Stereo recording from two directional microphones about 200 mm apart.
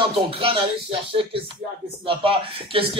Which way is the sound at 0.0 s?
25° right (ahead or behind).